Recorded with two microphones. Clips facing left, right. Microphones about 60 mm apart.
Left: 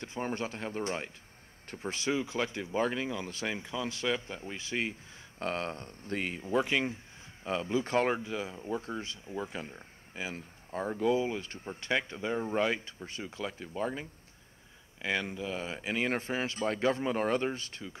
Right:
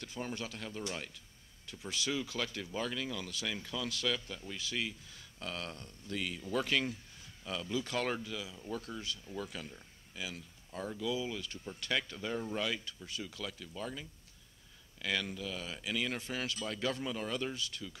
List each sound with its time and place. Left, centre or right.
0.0 s speech: left